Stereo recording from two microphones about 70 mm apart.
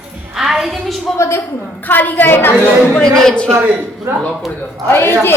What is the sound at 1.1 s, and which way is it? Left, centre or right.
Speech, left.